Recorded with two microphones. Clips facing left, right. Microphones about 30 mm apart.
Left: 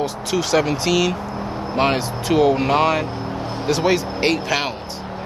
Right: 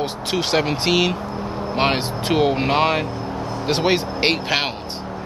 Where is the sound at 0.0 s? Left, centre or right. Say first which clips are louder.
Left 1 dB; right.